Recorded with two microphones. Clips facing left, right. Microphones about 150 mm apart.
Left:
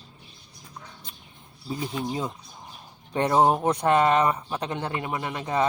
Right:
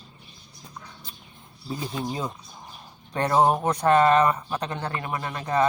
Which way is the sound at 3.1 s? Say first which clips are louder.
Even; 20° left (ahead or behind).